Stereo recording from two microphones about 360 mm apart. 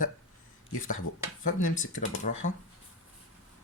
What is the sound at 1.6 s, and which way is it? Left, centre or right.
Speech, left.